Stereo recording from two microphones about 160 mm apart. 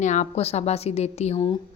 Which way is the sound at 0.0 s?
50° left (ahead or behind).